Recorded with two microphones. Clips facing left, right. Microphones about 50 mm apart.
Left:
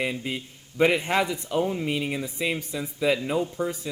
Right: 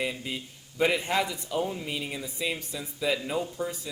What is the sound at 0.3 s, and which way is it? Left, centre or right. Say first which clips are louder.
Speech: left 4 dB; left.